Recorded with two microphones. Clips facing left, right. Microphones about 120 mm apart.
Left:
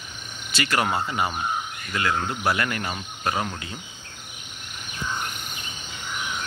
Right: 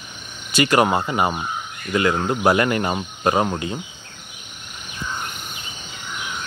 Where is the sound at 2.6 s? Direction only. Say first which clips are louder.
Right 8 dB; 25° right (ahead or behind).